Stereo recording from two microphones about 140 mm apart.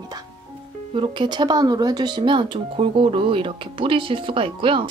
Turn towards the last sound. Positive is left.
turn(degrees=-35)  # may be behind; listen again after turning